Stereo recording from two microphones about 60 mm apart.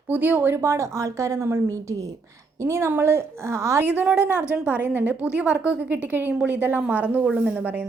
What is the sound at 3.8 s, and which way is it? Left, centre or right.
A woman's voice, right.